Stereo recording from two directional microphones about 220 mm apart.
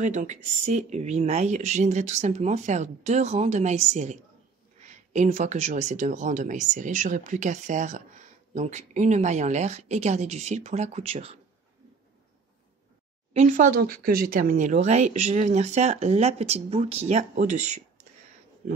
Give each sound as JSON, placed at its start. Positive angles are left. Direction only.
{"t": 0.0, "sound": "speech", "side_deg": -35}
{"t": 13.3, "sound": "speech", "side_deg": -35}